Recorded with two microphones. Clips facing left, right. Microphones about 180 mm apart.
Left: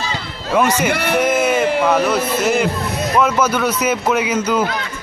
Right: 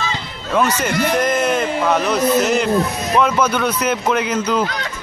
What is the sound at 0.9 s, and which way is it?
Speech, 65° left (ahead or behind).